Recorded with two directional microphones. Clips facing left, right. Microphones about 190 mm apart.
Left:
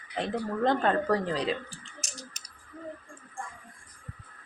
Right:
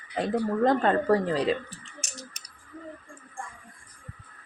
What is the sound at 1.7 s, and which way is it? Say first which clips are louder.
Clicking: right 2 dB; 35° left (ahead or behind).